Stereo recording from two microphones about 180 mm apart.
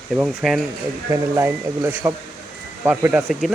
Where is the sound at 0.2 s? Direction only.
Centre (ahead or behind).